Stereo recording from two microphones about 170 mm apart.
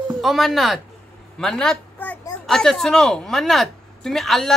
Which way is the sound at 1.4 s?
5° left (ahead or behind).